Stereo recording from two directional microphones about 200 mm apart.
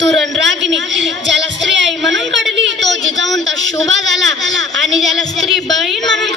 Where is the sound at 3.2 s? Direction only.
Centre (ahead or behind).